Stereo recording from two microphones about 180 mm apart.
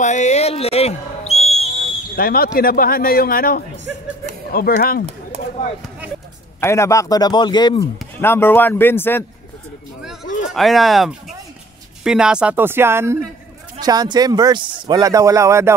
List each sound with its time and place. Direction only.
0.0 s a sound: 40° left (ahead or behind)
2.1 s a man's voice: 55° left (ahead or behind)
6.6 s speech: 15° left (ahead or behind)
8.2 s speech: 10° left (ahead or behind)
10.2 s a sound: 45° left (ahead or behind)
10.5 s a man's voice: centre (ahead or behind); by 15.7 s 15° right (ahead or behind)